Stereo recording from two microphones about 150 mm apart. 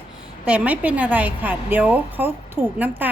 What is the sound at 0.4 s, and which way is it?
Speech, 10° right (ahead or behind).